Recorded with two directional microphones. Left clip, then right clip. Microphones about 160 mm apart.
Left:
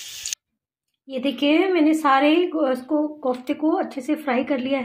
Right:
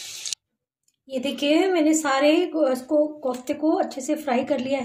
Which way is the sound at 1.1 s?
40° left (ahead or behind).